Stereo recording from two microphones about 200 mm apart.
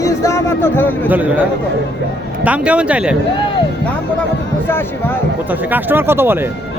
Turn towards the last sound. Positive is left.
turn(degrees=-10)  # may be behind; listen again after turning